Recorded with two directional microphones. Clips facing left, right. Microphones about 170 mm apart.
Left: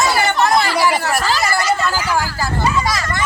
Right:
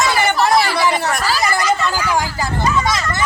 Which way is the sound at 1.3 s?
20° right (ahead or behind).